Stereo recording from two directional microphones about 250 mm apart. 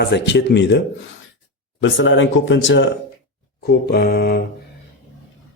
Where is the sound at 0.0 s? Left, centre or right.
Left.